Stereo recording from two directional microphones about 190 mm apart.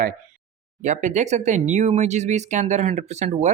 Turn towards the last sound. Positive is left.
turn(degrees=-35)  # may be behind; listen again after turning